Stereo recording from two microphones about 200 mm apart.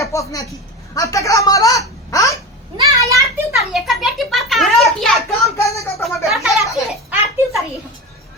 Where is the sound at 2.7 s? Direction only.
15° right (ahead or behind).